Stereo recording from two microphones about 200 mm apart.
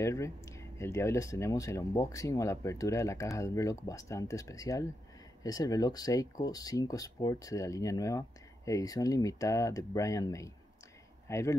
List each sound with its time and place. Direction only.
0.0 s speech: 15° left (ahead or behind)